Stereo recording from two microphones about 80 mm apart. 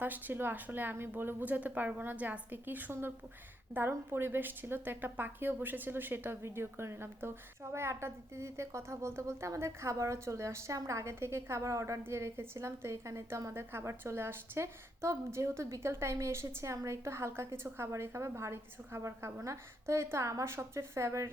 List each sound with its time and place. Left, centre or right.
0.0 s a woman's voice: right